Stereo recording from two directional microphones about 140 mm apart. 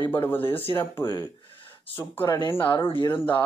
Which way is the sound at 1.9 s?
20° left (ahead or behind).